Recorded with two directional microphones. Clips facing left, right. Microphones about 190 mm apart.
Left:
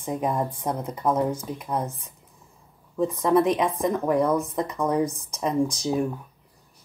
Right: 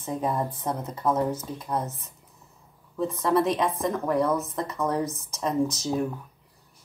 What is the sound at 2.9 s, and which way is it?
Speech, 15° left (ahead or behind).